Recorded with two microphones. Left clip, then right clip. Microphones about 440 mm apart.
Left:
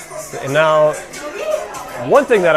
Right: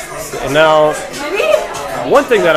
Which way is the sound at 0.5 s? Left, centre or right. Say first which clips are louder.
Right 3 dB; left.